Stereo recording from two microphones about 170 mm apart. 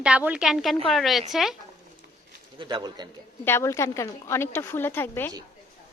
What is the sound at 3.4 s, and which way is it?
A woman's voice, 15° left (ahead or behind).